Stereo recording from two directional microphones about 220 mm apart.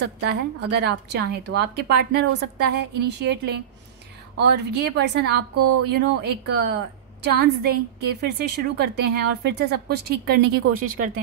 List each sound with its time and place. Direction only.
0.0 s a woman's voice: 50° right (ahead or behind)